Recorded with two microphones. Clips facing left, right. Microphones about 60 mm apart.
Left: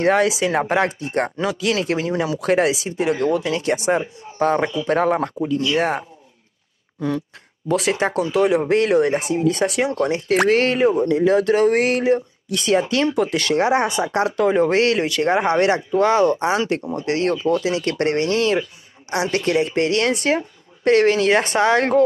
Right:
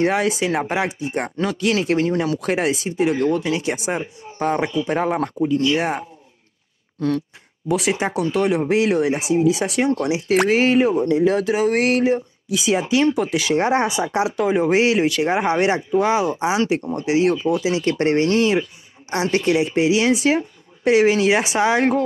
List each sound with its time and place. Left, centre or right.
0.0 s speech: centre
1.2 s speech: centre
7.0 s a sound: centre
7.6 s speech: centre
15.0 s speech: centre
15.3 s speech: centre
19.7 s speech: centre